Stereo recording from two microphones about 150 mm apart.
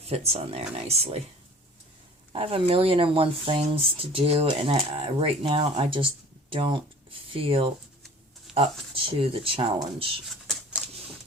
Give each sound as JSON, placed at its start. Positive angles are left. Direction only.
{"t": 0.1, "sound": "speech", "side_deg": -45}
{"t": 2.3, "sound": "speech", "side_deg": -40}
{"t": 10.2, "sound": "shuffling cards", "side_deg": 0}